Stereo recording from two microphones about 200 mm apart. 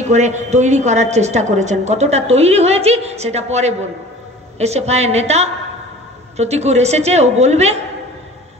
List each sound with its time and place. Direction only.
0.0 s a woman's voice: 35° right (ahead or behind)